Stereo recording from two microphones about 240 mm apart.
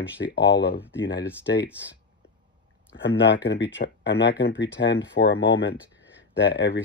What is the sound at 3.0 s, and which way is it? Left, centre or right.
Speech, left.